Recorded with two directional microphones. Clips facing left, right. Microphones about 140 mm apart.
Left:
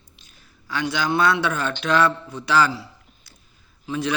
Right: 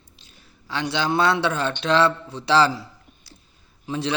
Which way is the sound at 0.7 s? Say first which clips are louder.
Even; 30° right (ahead or behind).